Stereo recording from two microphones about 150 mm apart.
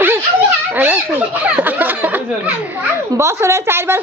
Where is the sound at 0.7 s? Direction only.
10° right (ahead or behind).